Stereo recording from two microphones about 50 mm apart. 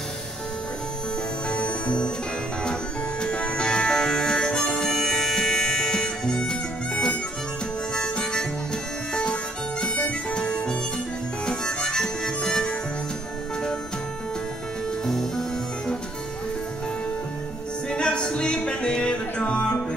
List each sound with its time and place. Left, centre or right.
1.5 s music: left
7.9 s harmonica: centre
15.0 s music: centre
17.8 s music: centre